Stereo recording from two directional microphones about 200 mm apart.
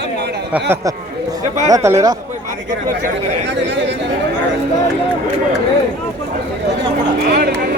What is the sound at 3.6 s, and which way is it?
Speech, 65° right (ahead or behind).